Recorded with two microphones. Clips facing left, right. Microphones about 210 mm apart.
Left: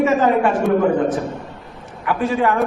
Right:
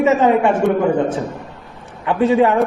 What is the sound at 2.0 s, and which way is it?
Speech, 25° right (ahead or behind).